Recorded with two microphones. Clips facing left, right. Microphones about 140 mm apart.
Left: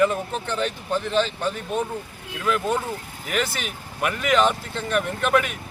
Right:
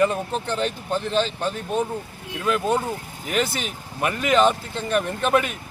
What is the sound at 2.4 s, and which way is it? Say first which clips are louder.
Speech: right 1 dB; 25° right (ahead or behind).